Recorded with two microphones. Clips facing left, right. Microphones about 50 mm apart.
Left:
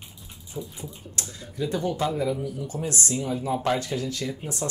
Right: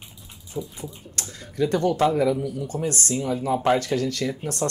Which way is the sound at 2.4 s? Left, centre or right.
Right.